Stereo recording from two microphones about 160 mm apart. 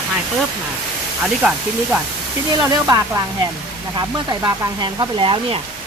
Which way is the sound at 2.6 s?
20° right (ahead or behind).